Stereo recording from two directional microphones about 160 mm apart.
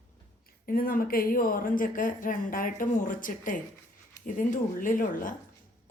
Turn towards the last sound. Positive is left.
turn(degrees=55)  # may be behind; listen again after turning